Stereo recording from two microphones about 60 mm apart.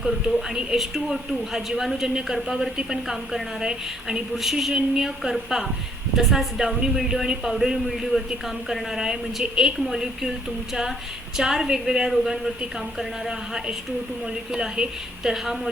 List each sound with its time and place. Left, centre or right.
0.0 s a man's voice: centre
11.3 s speech: centre